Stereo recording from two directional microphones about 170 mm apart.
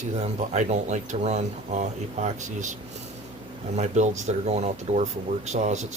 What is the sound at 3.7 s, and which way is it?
Speech, 40° right (ahead or behind).